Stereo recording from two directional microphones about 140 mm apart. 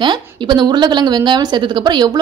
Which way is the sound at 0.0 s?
35° right (ahead or behind).